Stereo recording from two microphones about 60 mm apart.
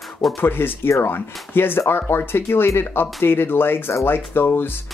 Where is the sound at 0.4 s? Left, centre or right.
Left.